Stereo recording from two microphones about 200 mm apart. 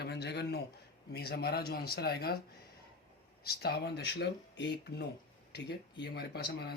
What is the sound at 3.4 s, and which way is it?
Speech, 50° left (ahead or behind).